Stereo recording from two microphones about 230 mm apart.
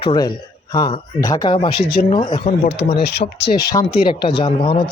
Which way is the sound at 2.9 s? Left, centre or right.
Left.